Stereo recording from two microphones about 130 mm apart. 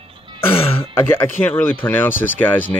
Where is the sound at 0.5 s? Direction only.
50° left (ahead or behind).